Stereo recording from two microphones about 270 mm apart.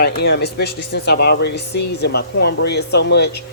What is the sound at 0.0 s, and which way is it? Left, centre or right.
Speech, left.